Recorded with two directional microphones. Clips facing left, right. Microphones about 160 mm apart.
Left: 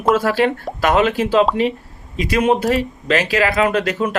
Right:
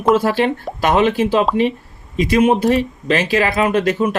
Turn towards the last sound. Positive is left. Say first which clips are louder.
# right 2 dB
turn(degrees=-25)  # may be behind; listen again after turning